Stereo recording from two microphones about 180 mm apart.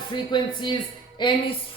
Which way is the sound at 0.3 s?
25° left (ahead or behind).